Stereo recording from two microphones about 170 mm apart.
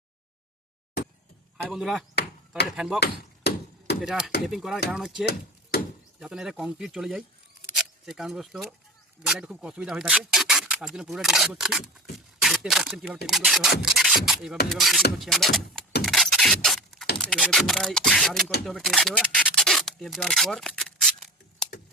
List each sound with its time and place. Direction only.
1.5 s speech: centre (ahead or behind)
3.0 s chop: 70° left (ahead or behind)
4.0 s speech: 5° right (ahead or behind)
5.2 s a sound: 70° left (ahead or behind)
6.1 s speech: 5° right (ahead or behind)
16.0 s a sound: centre (ahead or behind)
17.2 s speech: 5° left (ahead or behind)
18.6 s rub: centre (ahead or behind)